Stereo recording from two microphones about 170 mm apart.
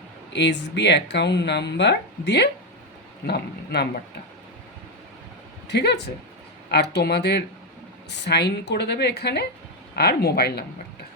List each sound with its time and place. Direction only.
0.3 s speech: 90° left
3.2 s speech: 70° left (ahead or behind)
5.6 s speech: 85° left
6.7 s a woman's voice: 75° left (ahead or behind)